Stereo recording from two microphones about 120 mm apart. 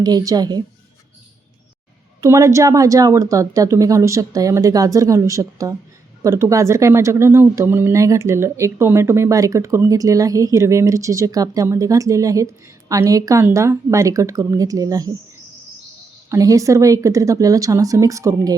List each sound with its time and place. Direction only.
0.0 s a woman's voice: 30° right (ahead or behind)
2.2 s speech: 25° right (ahead or behind)
16.3 s speech: 25° right (ahead or behind)